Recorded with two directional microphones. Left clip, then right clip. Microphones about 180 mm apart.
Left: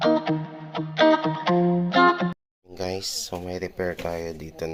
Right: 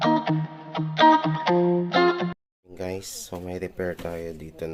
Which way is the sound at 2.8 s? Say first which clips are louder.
Left 4 dB; 10° right (ahead or behind).